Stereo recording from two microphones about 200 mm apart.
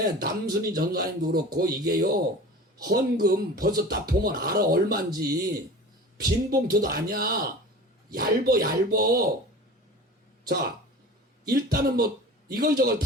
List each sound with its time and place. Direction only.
0.0 s speech: 50° right (ahead or behind)
5.1 s speech: 20° right (ahead or behind)
6.2 s speech: 50° right (ahead or behind)
11.5 s speech: 50° right (ahead or behind)